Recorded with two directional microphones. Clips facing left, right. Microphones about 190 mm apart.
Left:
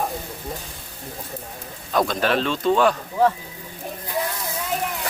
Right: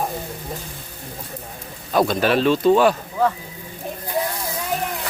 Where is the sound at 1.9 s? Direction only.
5° right (ahead or behind).